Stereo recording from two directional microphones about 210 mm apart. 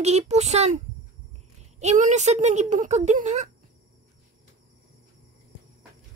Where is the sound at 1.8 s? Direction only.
35° right (ahead or behind).